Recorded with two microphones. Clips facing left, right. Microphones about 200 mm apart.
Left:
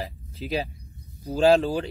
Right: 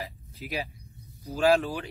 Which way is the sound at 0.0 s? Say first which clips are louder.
Left 5 dB; 30° left (ahead or behind).